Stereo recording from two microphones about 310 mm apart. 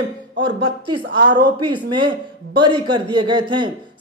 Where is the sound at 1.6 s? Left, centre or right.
Centre.